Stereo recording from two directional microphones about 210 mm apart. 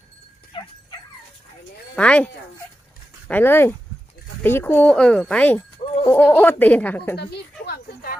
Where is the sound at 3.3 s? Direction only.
10° left (ahead or behind).